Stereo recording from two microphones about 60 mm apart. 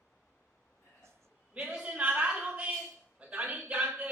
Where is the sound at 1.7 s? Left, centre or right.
Centre.